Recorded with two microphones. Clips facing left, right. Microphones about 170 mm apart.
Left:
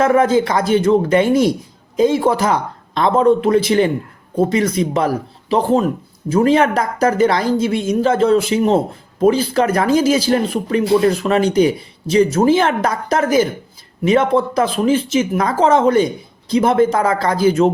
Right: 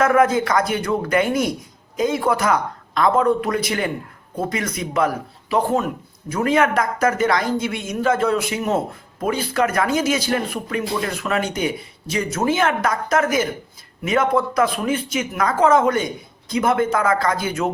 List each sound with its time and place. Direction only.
0.0 s speech: 30° left (ahead or behind)